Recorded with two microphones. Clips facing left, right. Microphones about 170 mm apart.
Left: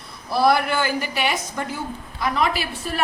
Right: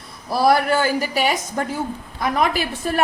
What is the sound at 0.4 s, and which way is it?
A woman's voice, 40° right (ahead or behind).